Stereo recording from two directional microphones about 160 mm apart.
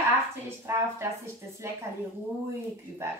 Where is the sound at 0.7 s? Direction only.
15° right (ahead or behind).